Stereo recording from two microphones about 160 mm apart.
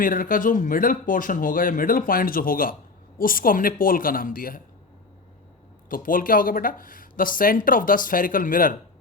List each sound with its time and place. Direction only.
0.0 s speech: 60° left (ahead or behind)
5.9 s speech: 60° left (ahead or behind)